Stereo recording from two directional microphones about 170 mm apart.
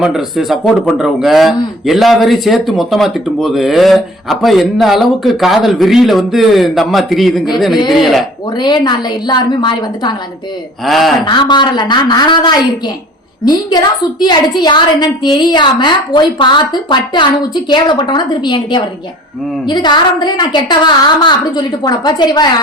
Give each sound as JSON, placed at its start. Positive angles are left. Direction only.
{"t": 0.0, "sound": "a man's voice", "side_deg": 0}
{"t": 8.5, "sound": "a woman's voice", "side_deg": 25}
{"t": 10.8, "sound": "a man's voice", "side_deg": 0}
{"t": 11.3, "sound": "a woman's voice", "side_deg": 25}